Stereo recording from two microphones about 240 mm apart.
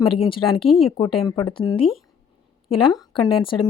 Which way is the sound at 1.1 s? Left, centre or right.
Left.